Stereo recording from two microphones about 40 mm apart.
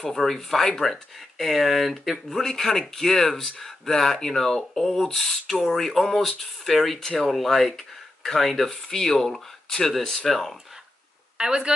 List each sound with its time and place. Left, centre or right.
0.0 s speech: centre
11.3 s speech: right